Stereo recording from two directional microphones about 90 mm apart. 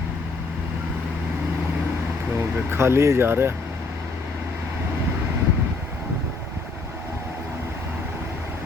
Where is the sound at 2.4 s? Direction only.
30° right (ahead or behind).